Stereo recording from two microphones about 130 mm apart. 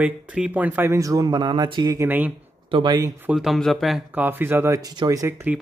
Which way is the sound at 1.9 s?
15° right (ahead or behind).